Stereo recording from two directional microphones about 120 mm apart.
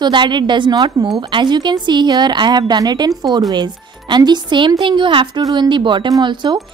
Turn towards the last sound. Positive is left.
turn(degrees=-35)  # may be behind; listen again after turning